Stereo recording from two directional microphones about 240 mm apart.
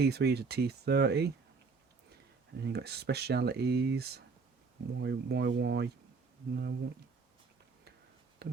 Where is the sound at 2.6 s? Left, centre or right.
Right.